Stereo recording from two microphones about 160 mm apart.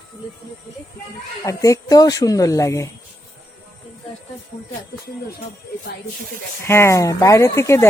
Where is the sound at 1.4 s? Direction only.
20° left (ahead or behind).